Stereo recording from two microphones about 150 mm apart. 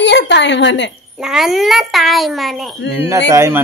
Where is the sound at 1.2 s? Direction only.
Centre (ahead or behind).